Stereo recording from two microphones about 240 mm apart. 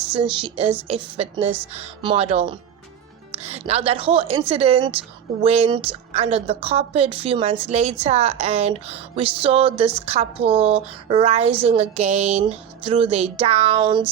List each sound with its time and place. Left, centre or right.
0.1 s a woman's voice: centre